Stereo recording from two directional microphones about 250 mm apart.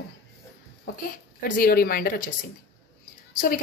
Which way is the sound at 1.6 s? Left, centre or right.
Left.